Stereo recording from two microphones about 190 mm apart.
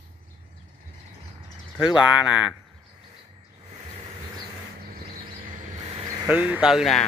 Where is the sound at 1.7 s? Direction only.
5° right (ahead or behind).